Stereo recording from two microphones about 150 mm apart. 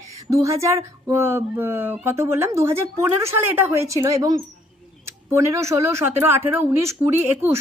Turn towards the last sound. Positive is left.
turn(degrees=-15)  # may be behind; listen again after turning